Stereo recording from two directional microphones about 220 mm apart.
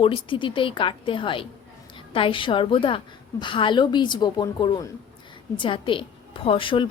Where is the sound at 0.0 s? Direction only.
25° left (ahead or behind).